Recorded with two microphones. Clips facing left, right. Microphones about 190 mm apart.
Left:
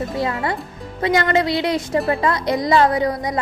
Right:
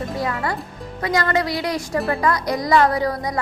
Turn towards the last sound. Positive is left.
turn(degrees=20)  # may be behind; listen again after turning